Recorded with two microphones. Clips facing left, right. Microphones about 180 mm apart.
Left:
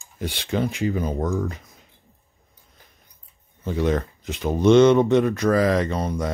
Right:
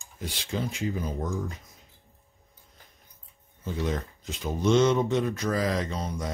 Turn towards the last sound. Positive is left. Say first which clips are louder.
# left 7 dB
turn(degrees=60)  # may be behind; listen again after turning